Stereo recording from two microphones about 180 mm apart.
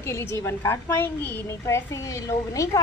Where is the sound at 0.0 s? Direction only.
15° left (ahead or behind).